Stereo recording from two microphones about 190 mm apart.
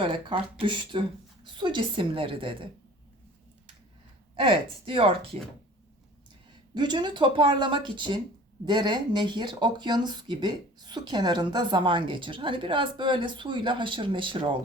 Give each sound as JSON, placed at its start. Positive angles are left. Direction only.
{"t": 0.0, "sound": "speech", "side_deg": -25}
{"t": 4.4, "sound": "speech", "side_deg": -25}
{"t": 6.7, "sound": "speech", "side_deg": -25}